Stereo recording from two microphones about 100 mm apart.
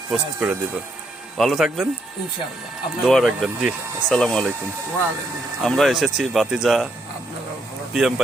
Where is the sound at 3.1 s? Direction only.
Centre (ahead or behind).